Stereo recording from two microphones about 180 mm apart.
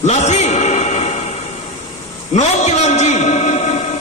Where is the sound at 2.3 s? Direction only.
40° left (ahead or behind).